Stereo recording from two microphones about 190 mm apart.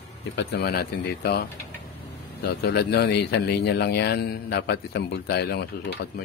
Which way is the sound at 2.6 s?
60° left (ahead or behind).